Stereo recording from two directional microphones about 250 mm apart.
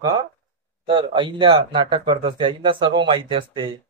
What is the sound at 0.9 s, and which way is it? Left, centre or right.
Speech, centre.